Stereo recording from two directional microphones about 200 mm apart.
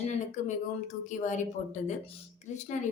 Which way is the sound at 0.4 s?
35° left (ahead or behind).